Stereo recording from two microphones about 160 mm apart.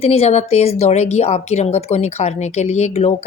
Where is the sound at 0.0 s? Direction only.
40° left (ahead or behind).